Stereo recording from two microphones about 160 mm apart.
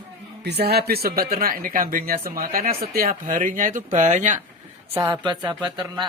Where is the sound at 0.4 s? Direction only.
90° right; by 4.4 s 50° right (ahead or behind).